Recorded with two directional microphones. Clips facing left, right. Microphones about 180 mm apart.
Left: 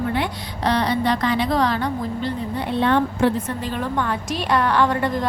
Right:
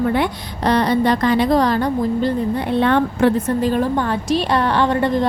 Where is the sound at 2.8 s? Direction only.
60° right (ahead or behind).